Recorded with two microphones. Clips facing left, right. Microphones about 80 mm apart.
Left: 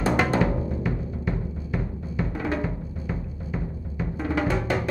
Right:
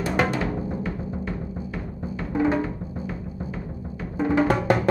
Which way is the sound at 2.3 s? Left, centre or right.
Centre.